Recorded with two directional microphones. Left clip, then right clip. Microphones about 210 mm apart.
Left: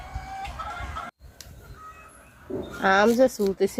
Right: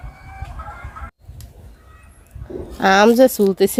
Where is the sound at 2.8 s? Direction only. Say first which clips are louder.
Right 7 dB; 55° right (ahead or behind).